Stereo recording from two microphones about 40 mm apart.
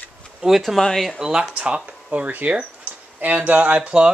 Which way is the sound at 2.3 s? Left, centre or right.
Right.